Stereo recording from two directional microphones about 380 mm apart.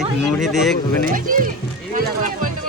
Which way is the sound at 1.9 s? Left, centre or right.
Right.